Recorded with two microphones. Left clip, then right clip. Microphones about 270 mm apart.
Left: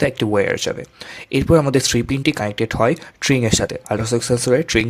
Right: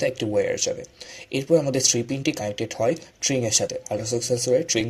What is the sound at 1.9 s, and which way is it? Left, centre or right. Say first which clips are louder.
Speech: left 6 dB; left.